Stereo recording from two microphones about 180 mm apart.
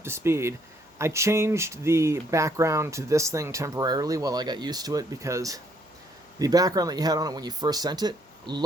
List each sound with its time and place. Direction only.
0.0 s speech: 15° right (ahead or behind)